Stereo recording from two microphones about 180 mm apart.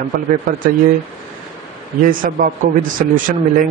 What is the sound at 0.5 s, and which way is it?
Speech, 45° right (ahead or behind).